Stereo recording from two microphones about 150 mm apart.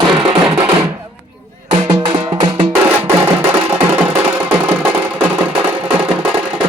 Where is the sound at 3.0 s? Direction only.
15° right (ahead or behind).